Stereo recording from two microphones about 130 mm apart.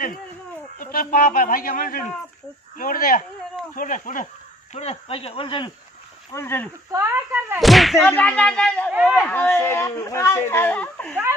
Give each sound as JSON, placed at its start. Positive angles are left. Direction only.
{"t": 0.7, "sound": "a man's voice", "side_deg": 90}
{"t": 4.7, "sound": "speech", "side_deg": 50}
{"t": 6.3, "sound": "a man's voice", "side_deg": 15}
{"t": 6.9, "sound": "speech", "side_deg": -20}
{"t": 7.6, "sound": "whip", "side_deg": 0}
{"t": 8.0, "sound": "a man's voice", "side_deg": 10}
{"t": 8.9, "sound": "speech", "side_deg": -5}
{"t": 9.3, "sound": "speech", "side_deg": 15}